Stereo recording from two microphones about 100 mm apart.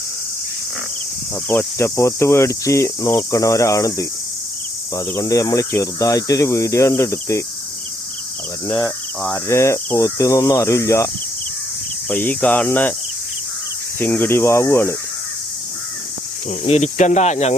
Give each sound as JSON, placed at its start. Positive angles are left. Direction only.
{"t": 1.5, "sound": "cricket", "side_deg": 25}
{"t": 4.9, "sound": "speech", "side_deg": 35}
{"t": 9.3, "sound": "speech", "side_deg": 30}
{"t": 12.0, "sound": "speech", "side_deg": 15}
{"t": 14.0, "sound": "cricket", "side_deg": 20}
{"t": 16.6, "sound": "speech", "side_deg": 90}